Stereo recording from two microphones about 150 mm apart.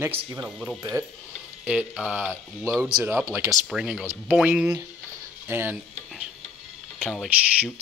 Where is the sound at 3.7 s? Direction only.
5° right (ahead or behind).